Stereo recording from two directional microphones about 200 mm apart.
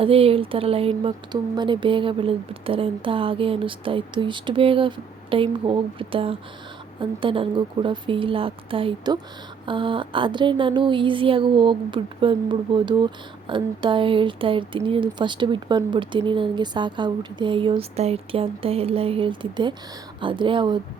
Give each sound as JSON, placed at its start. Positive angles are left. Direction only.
{"t": 0.0, "sound": "speech", "side_deg": -30}